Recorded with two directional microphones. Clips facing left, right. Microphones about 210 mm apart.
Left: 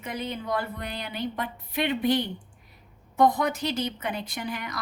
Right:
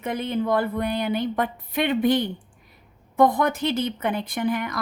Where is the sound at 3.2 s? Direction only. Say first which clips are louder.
Right 3 dB; 55° right (ahead or behind).